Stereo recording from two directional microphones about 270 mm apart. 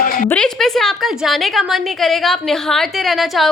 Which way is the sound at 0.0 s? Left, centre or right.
Left.